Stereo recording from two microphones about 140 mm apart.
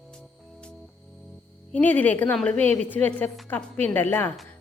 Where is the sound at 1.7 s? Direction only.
10° left (ahead or behind).